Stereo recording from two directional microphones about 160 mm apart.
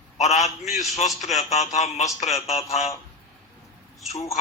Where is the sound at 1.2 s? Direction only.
45° left (ahead or behind).